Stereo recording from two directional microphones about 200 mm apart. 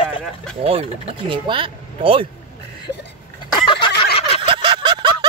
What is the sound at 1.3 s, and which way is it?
Speech, 25° right (ahead or behind).